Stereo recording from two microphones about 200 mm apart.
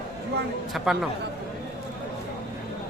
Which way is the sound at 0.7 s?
Centre (ahead or behind).